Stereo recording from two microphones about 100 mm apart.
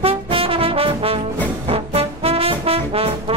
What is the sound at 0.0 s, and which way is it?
Brass instrument, 70° right (ahead or behind).